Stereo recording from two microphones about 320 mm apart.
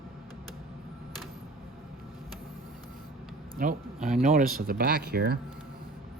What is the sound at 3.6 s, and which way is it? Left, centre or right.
Speech, right.